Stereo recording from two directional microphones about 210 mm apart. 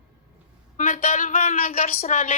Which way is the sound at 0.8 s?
35° left (ahead or behind).